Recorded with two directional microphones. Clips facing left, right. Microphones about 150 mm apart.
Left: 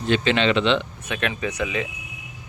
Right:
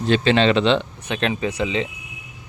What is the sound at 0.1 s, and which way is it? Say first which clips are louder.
Speech: right 3 dB; 35° right (ahead or behind).